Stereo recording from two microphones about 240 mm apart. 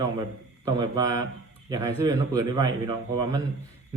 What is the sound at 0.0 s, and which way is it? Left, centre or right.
A man's voice, centre.